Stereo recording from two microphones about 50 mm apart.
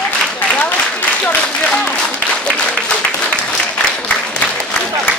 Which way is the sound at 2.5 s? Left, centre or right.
Centre.